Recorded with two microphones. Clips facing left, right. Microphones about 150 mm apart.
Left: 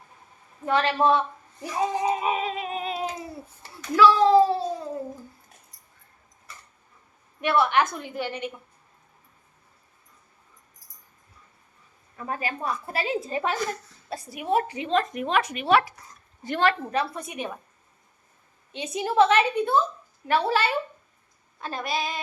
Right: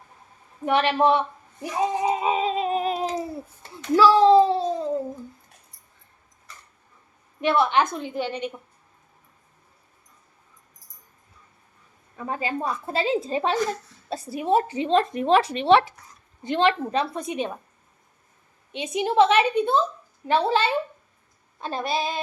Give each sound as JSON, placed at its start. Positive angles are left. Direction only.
{"t": 0.6, "sound": "a woman's voice", "side_deg": -20}
{"t": 2.7, "sound": "a sound", "side_deg": -40}
{"t": 3.8, "sound": "a child's voice", "side_deg": -30}
{"t": 4.4, "sound": "a woman's voice", "side_deg": -20}
{"t": 7.4, "sound": "a woman's voice", "side_deg": -20}
{"t": 12.1, "sound": "a woman's voice", "side_deg": -20}
{"t": 18.7, "sound": "a woman's voice", "side_deg": -20}